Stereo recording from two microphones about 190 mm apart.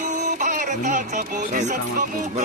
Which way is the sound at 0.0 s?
40° right (ahead or behind).